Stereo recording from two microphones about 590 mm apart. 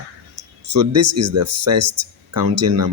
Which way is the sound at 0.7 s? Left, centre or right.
Right.